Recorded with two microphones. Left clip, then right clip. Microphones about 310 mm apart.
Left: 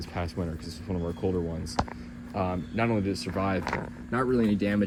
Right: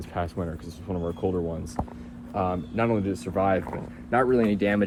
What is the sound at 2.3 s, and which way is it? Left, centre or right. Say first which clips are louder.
Speech: right 3 dB; right.